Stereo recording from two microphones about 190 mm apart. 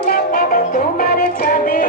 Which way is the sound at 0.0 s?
50° left (ahead or behind).